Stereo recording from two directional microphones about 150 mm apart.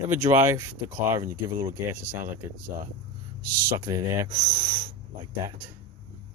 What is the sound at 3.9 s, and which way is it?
Speech, 20° right (ahead or behind).